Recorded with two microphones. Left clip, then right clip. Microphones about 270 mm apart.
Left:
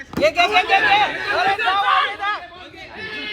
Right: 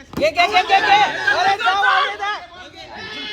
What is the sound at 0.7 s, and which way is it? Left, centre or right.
Speech, right.